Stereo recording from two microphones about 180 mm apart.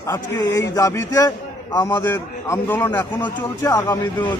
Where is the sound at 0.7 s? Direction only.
15° left (ahead or behind).